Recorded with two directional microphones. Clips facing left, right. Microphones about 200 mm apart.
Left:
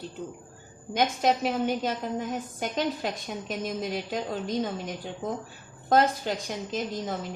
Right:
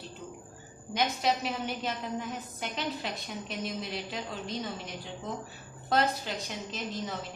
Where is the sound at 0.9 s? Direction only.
50° left (ahead or behind).